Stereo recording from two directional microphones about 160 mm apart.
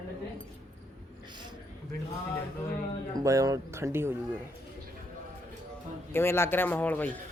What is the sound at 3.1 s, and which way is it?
Speech, 20° right (ahead or behind).